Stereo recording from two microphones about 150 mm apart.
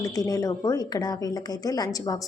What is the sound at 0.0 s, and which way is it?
A woman's voice, 25° left (ahead or behind).